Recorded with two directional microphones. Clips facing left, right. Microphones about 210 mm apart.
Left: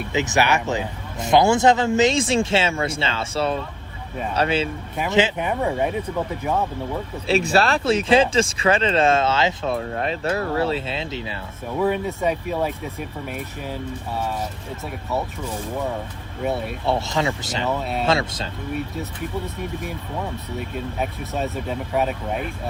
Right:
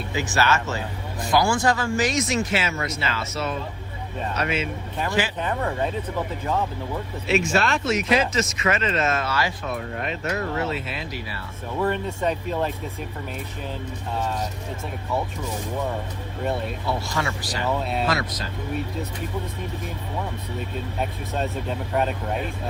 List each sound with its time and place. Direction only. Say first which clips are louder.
0.1 s speech: left 3 dB; 20° left (ahead or behind)
4.9 s speech: left 5 dB; 20° left (ahead or behind)
7.3 s speech: left 3 dB; 35° left (ahead or behind)
10.0 s speech: left 4 dB; 35° left (ahead or behind)
11.8 s speech: left 3 dB; 10° left (ahead or behind)
16.4 s speech: left 2 dB; 5° left (ahead or behind)
16.8 s speech: left 5 dB; 25° left (ahead or behind)
17.7 s speech: even; centre (ahead or behind)
18.0 s speech: left 4 dB; 25° left (ahead or behind)
21.0 s speech: left 1 dB; 5° left (ahead or behind)